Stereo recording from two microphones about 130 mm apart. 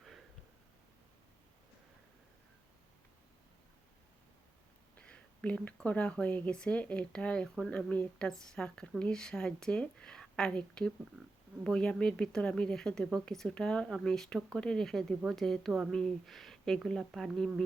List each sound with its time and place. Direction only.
4.9 s whispering: 10° left (ahead or behind)
5.8 s speech: 10° left (ahead or behind)